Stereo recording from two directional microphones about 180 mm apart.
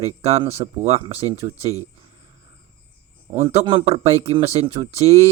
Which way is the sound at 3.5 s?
30° right (ahead or behind).